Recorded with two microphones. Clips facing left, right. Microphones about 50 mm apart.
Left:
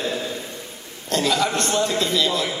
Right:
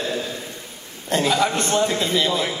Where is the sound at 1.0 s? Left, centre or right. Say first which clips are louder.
Right 1 dB; centre.